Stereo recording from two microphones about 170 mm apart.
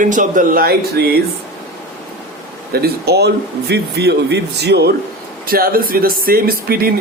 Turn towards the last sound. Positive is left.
turn(degrees=-60)  # may be behind; listen again after turning